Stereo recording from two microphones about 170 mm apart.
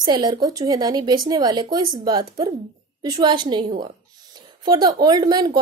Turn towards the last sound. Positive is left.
turn(degrees=-25)  # may be behind; listen again after turning